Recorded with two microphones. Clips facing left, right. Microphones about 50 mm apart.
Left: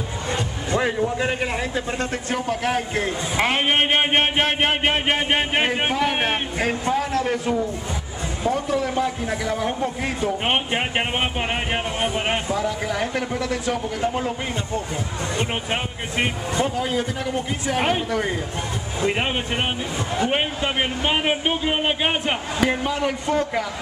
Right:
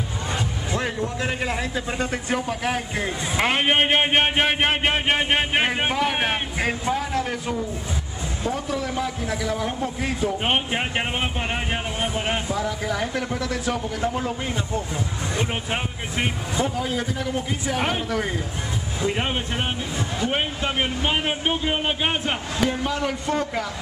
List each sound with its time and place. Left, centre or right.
0.7 s a man's voice: centre
10.7 s speech: centre
11.1 s speech: left
12.5 s a man's voice: centre
16.5 s a man's voice: centre
18.9 s speech: left
20.2 s speech: centre
21.5 s a man's voice: centre